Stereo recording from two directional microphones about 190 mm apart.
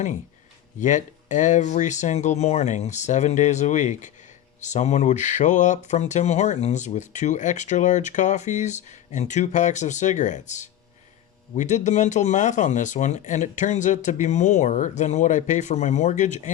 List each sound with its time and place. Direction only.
0.8 s speech: 40° left (ahead or behind)